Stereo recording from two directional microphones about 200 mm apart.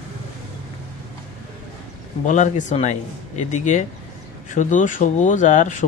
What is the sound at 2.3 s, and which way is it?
Speech, 35° left (ahead or behind).